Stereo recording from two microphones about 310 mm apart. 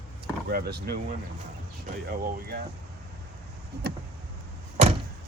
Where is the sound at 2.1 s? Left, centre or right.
Right.